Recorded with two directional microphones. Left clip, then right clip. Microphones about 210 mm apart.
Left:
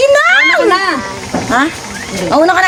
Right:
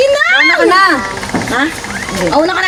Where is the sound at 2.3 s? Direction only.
40° left (ahead or behind).